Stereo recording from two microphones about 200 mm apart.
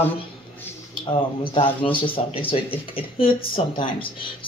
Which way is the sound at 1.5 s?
25° left (ahead or behind).